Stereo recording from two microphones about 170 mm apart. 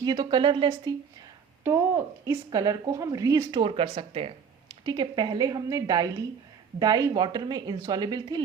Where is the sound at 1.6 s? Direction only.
15° right (ahead or behind).